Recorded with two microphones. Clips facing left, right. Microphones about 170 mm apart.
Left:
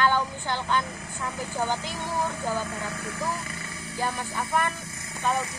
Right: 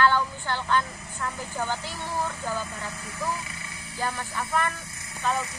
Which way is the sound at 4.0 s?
15° left (ahead or behind).